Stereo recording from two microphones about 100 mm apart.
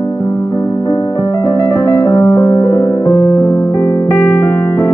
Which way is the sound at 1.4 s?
25° left (ahead or behind).